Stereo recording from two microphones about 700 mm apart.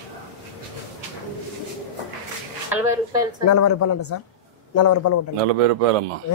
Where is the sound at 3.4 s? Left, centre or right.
Left.